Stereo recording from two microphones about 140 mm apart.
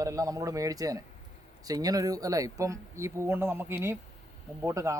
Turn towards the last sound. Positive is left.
turn(degrees=-20)  # may be behind; listen again after turning